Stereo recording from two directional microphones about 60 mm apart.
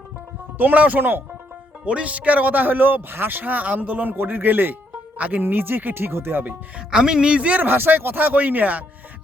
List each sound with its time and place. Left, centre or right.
0.6 s speech: right
1.8 s speech: right
6.7 s speech: centre
7.7 s speech: right